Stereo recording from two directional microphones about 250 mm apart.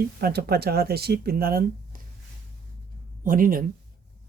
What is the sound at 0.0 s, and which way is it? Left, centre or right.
Speech, right.